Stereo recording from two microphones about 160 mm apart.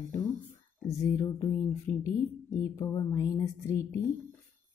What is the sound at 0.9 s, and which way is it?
Speech, 20° left (ahead or behind).